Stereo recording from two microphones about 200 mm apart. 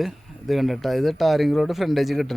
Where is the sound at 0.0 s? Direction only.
Centre (ahead or behind).